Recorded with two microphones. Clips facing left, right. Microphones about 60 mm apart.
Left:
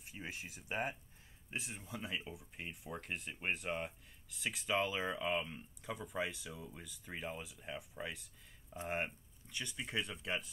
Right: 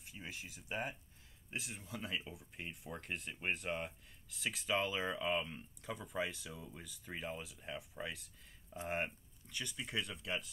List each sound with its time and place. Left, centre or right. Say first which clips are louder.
0.1 s speech: left 2 dB; left
1.6 s speech: even; centre